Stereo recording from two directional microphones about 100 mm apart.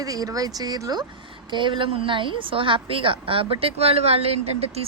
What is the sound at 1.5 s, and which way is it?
A woman's voice, 55° right (ahead or behind).